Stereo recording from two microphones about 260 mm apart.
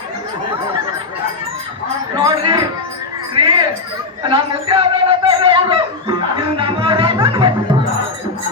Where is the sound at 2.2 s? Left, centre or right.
Centre.